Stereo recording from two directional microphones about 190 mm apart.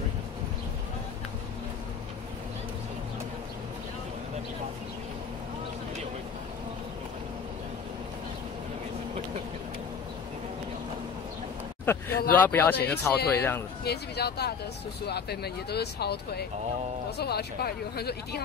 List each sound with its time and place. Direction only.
11.8 s a sound: 10° left (ahead or behind)
12.8 s speech: 10° left (ahead or behind)
13.8 s speech: 60° left (ahead or behind)